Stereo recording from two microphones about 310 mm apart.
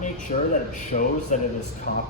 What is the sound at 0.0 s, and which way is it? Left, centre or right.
Speech, left.